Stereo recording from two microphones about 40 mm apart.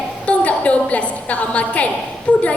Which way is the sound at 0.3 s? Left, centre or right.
Left.